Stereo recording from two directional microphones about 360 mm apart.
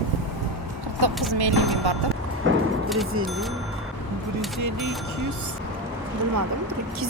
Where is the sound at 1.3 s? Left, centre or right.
Right.